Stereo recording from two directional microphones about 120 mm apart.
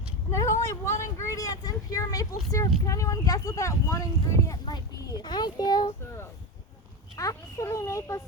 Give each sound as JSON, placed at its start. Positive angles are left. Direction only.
{"t": 0.3, "sound": "vehicle", "side_deg": 25}
{"t": 0.6, "sound": "a child's voice", "side_deg": 25}
{"t": 7.2, "sound": "speech", "side_deg": 25}